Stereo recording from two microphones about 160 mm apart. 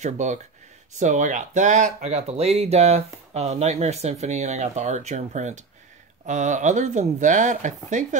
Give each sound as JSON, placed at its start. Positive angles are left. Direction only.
{"t": 0.0, "sound": "speech", "side_deg": -45}